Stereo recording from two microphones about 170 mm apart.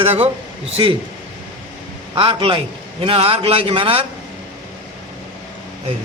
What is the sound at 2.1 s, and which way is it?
A man's voice, 30° right (ahead or behind).